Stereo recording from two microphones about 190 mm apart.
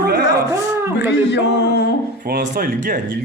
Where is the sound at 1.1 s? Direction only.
65° left (ahead or behind).